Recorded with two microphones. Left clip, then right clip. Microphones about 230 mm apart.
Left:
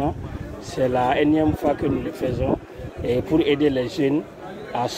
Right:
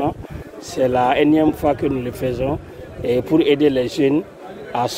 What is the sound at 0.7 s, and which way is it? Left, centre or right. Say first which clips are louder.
Speech: right 4 dB; right.